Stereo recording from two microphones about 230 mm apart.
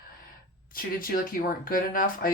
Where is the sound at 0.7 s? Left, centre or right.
Left.